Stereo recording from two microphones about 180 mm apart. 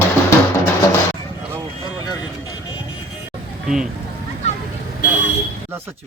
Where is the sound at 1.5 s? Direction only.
5° right (ahead or behind).